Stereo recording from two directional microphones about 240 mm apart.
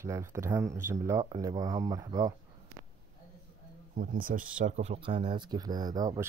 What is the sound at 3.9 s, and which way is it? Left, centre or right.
Speech, right.